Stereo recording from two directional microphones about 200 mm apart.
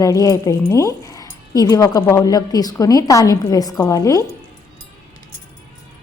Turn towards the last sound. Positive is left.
turn(degrees=15)  # may be behind; listen again after turning